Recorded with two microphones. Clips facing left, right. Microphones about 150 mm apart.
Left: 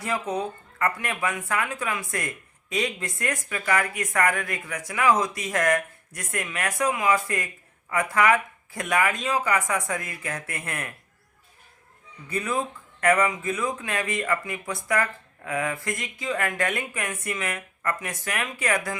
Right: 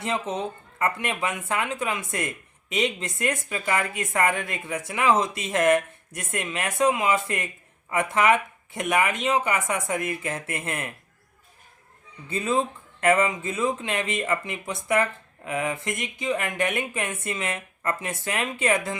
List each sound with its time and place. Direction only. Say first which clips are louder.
0.0 s speech: even; 25° right (ahead or behind)
12.3 s speech: right 3 dB; 25° right (ahead or behind)